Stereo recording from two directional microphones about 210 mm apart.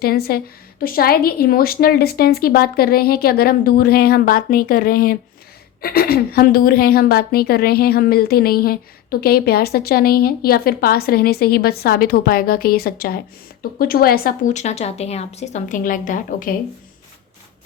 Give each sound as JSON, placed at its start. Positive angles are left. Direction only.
{"t": 0.0, "sound": "a woman's voice", "side_deg": 45}